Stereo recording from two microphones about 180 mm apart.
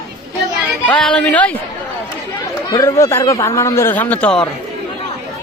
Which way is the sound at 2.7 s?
20° left (ahead or behind).